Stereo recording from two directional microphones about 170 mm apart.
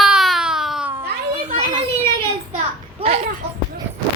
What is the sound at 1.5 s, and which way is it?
Children playing, 40° right (ahead or behind).